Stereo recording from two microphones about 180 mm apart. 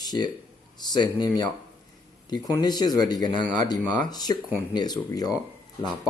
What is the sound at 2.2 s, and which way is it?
Speech, 25° left (ahead or behind).